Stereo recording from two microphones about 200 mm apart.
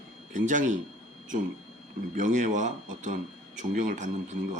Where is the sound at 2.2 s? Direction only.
40° right (ahead or behind).